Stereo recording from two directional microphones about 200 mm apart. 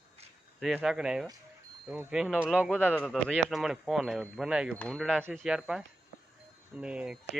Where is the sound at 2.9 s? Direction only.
5° left (ahead or behind).